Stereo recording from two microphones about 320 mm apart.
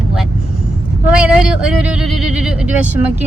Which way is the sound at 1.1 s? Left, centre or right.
Centre.